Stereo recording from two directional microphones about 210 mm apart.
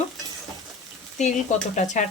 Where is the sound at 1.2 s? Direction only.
35° left (ahead or behind).